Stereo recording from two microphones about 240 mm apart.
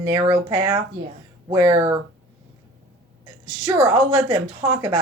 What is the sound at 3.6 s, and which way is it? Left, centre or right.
Speech, centre.